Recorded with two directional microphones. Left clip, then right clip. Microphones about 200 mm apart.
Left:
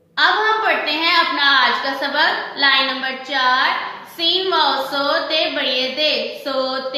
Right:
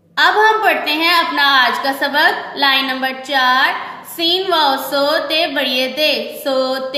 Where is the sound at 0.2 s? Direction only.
50° right (ahead or behind).